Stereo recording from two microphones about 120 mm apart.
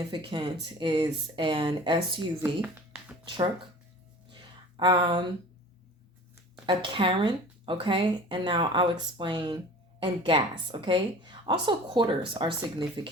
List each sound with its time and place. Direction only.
0.1 s speech: 40° right (ahead or behind)
2.4 s a sound: 15° right (ahead or behind)
4.8 s speech: 40° right (ahead or behind)
6.7 s a woman's voice: 45° right (ahead or behind)